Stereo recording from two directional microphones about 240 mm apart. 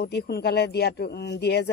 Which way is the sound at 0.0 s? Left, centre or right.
Left.